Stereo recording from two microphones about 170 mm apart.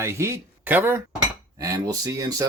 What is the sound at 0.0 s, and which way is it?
Speech, 15° right (ahead or behind).